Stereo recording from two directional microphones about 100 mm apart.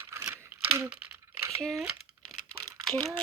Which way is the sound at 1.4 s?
30° right (ahead or behind).